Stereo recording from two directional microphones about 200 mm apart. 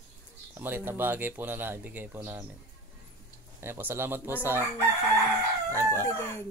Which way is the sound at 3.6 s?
10° right (ahead or behind).